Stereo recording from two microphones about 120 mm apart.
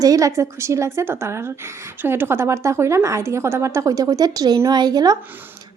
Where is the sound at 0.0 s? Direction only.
30° right (ahead or behind).